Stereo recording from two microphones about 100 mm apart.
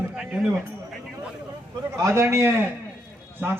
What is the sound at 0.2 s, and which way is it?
Speech, 10° right (ahead or behind).